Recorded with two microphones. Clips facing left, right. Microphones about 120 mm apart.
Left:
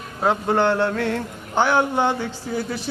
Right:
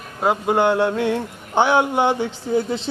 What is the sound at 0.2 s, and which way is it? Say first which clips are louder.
Speech: right 1 dB; 10° right (ahead or behind).